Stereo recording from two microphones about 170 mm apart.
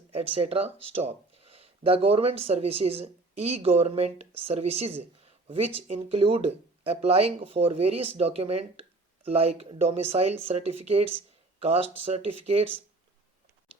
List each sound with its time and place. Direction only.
0.1 s speech: 35° right (ahead or behind)